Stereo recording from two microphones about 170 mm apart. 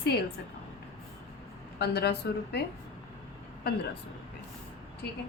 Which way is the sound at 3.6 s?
70° left (ahead or behind).